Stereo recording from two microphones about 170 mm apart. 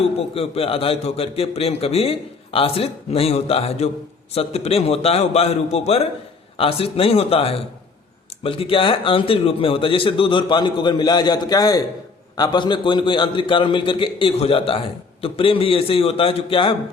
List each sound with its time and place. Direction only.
0.2 s a man's voice: 35° left (ahead or behind)